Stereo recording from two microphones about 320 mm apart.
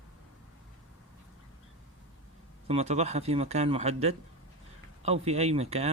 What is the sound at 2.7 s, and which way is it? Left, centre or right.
Speech, centre.